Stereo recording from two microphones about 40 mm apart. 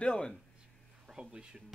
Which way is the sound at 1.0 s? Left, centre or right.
Centre.